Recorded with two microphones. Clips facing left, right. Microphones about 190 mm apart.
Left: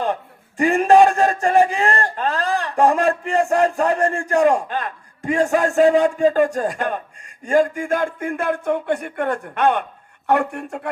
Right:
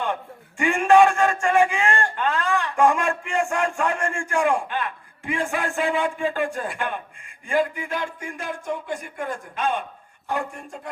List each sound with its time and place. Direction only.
0.0 s a man's voice: 35° left (ahead or behind); by 10.8 s 65° left (ahead or behind)